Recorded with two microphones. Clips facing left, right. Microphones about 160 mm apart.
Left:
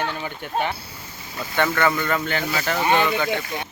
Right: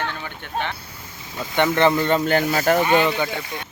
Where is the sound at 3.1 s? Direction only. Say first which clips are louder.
Left 2 dB; 10° right (ahead or behind).